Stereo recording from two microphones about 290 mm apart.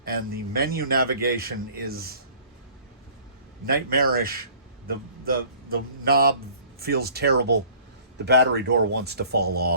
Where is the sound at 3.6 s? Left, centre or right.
Right.